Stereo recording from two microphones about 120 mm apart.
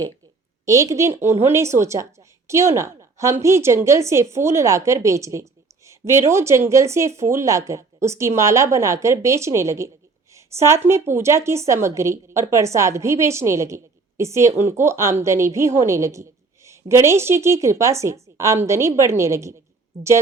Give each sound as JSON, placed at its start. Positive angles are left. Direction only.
{"t": 0.6, "sound": "a woman's voice", "side_deg": -30}